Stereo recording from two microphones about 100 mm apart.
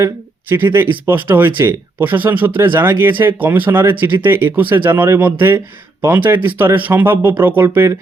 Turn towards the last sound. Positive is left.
turn(degrees=-25)  # may be behind; listen again after turning